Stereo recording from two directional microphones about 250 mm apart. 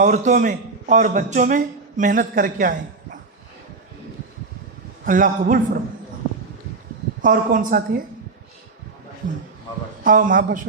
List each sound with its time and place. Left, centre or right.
0.0 s a man's voice: right
5.0 s a man's voice: right
7.2 s a man's voice: right
10.0 s a man's voice: right